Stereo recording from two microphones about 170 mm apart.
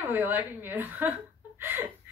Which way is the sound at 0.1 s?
10° right (ahead or behind).